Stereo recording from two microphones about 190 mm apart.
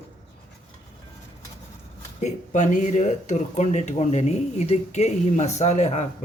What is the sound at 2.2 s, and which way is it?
Speech, 40° left (ahead or behind).